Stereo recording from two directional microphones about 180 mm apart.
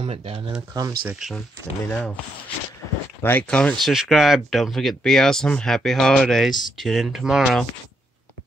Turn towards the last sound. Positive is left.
turn(degrees=0)  # may be behind; listen again after turning